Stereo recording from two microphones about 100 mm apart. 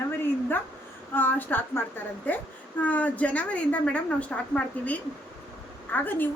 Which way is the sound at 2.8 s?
15° left (ahead or behind).